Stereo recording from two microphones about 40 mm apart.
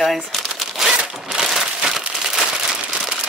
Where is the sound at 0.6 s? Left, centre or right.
Centre.